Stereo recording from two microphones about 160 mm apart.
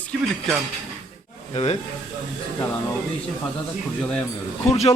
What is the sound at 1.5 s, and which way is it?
Speech, 40° left (ahead or behind).